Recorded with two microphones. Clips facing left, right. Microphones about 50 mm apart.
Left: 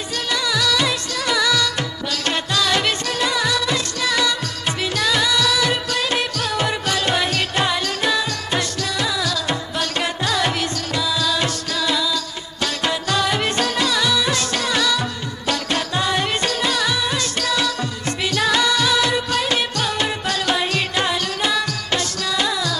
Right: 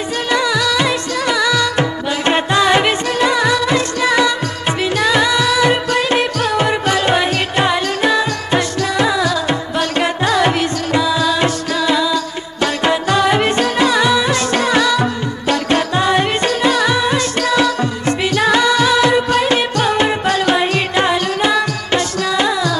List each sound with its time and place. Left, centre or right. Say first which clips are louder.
0.3 s music: right 5 dB; right